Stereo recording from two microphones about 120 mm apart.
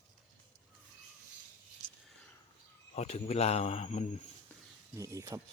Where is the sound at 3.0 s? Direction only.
60° left (ahead or behind).